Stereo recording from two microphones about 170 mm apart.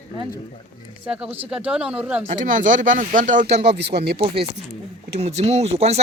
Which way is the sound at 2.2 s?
50° right (ahead or behind).